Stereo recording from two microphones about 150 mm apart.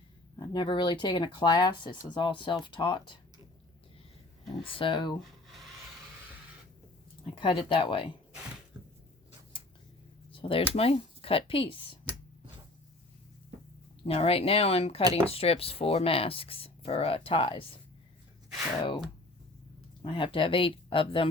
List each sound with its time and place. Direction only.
0.3 s speech: 30° left (ahead or behind)
4.6 s speech: 35° left (ahead or behind)
5.5 s rub: centre (ahead or behind)
7.3 s speech: 35° left (ahead or behind)
10.3 s a sound: 35° left (ahead or behind)
10.8 s speech: 40° left (ahead or behind)
14.0 s speech: 40° left (ahead or behind)
20.0 s speech: 35° left (ahead or behind)